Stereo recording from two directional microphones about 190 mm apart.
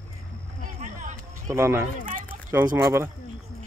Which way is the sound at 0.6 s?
40° right (ahead or behind).